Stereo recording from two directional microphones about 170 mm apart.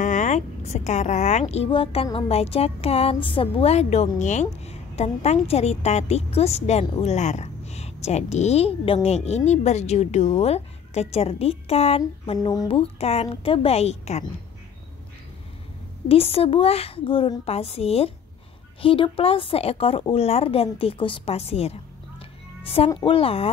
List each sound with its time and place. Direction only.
0.0 s a woman's voice: 45° left (ahead or behind)
12.4 s a woman's voice: 25° left (ahead or behind); by 14.2 s 40° left (ahead or behind)
16.1 s a woman's voice: 35° left (ahead or behind)
22.9 s a woman's voice: 30° left (ahead or behind)